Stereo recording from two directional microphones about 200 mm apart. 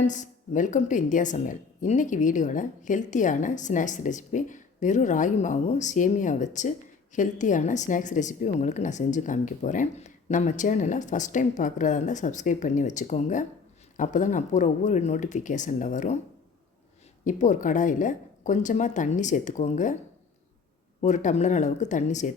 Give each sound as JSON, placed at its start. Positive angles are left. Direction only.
{"t": 0.0, "sound": "a woman's voice", "side_deg": 40}
{"t": 17.2, "sound": "a woman's voice", "side_deg": 40}
{"t": 21.0, "sound": "a woman's voice", "side_deg": 35}